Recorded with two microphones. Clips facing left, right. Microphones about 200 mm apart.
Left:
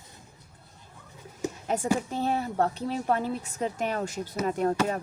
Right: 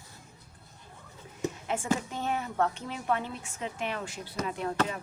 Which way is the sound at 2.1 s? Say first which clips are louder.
Left 5 dB; 35° left (ahead or behind).